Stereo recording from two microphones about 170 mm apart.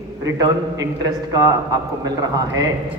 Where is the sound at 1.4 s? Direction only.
20° right (ahead or behind).